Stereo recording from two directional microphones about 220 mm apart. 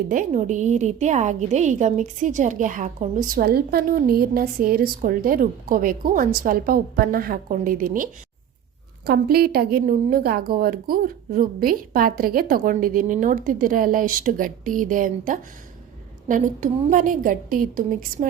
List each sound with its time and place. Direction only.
0.1 s a woman's voice: 35° right (ahead or behind)